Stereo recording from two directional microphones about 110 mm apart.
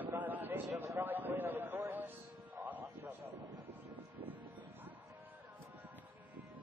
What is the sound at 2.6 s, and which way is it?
Music, 15° right (ahead or behind).